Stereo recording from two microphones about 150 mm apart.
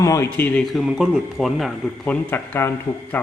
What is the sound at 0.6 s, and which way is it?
Speech, centre (ahead or behind).